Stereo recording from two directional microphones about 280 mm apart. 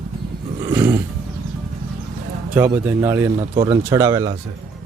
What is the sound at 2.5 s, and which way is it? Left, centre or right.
Speech, centre.